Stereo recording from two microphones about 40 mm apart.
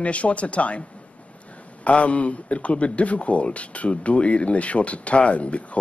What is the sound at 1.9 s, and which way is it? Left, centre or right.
A man's voice, left.